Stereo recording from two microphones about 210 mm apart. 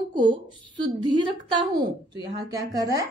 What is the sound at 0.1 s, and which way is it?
A woman's voice, 20° right (ahead or behind).